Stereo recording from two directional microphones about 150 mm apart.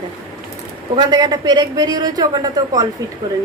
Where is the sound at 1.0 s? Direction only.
25° right (ahead or behind).